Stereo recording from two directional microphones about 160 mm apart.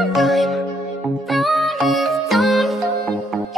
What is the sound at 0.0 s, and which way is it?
Music, centre (ahead or behind).